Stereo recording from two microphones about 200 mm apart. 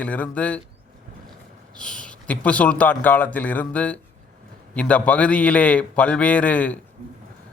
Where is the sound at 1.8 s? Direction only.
5° left (ahead or behind).